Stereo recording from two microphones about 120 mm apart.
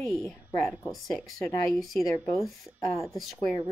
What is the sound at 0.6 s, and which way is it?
Speech, centre (ahead or behind).